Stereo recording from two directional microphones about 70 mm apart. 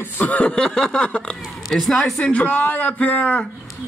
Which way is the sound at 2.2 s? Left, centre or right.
Left.